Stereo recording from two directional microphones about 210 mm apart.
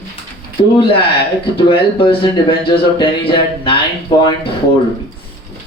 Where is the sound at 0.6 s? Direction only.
25° left (ahead or behind).